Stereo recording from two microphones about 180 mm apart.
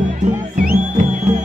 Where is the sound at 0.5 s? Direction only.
45° right (ahead or behind).